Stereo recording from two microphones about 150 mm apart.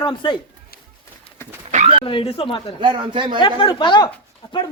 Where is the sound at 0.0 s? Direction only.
30° left (ahead or behind).